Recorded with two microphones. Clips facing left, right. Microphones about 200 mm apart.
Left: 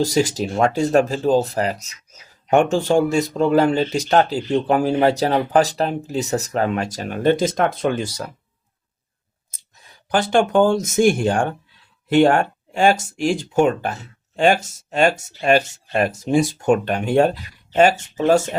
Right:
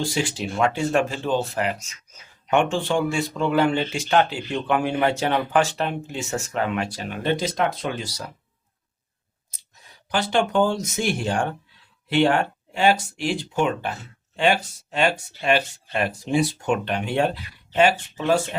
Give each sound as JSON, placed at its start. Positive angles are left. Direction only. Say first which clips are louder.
{"t": 0.0, "sound": "speech", "louder": "left 7 dB", "side_deg": 40}
{"t": 10.1, "sound": "speech", "louder": "left 5 dB", "side_deg": 50}